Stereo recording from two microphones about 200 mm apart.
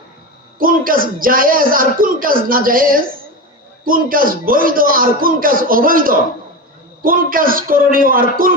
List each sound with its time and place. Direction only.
0.6 s speech: 45° right (ahead or behind)